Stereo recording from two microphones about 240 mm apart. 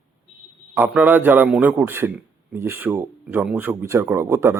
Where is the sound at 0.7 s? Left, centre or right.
Centre.